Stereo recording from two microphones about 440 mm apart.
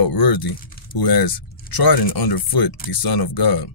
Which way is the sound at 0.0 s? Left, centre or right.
Left.